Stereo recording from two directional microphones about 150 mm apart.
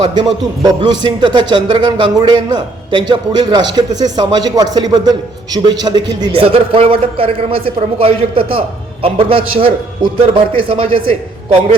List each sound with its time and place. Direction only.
0.0 s a man's voice: 30° right (ahead or behind)